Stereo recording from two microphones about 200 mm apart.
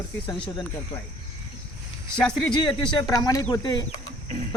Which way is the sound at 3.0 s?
20° left (ahead or behind).